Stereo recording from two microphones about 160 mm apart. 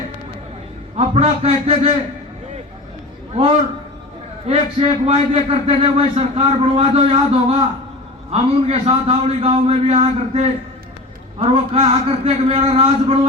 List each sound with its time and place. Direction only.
0.9 s a man's voice: 40° right (ahead or behind)
4.4 s a man's voice: 40° right (ahead or behind)